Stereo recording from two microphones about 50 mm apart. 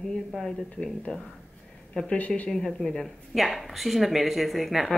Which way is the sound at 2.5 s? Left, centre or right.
Centre.